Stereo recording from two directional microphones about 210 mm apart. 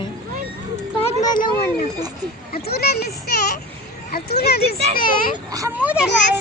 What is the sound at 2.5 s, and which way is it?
A child's voice, 45° left (ahead or behind).